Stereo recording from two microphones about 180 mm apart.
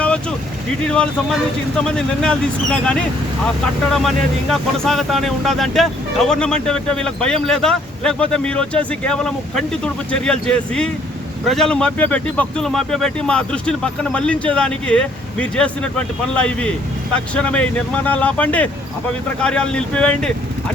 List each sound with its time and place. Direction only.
0.0 s vehicle: 5° left (ahead or behind)
0.9 s speech: 5° left (ahead or behind)